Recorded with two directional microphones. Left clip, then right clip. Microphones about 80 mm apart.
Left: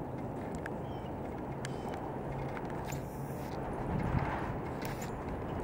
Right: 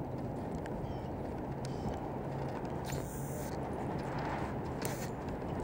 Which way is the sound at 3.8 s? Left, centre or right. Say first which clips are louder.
Left 1 dB; centre.